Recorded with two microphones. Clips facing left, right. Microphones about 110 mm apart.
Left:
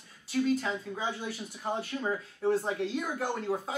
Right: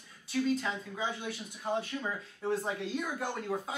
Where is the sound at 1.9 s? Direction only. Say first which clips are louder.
Left 3 dB; 20° left (ahead or behind).